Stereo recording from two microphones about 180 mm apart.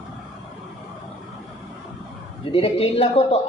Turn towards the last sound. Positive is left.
turn(degrees=35)  # may be behind; listen again after turning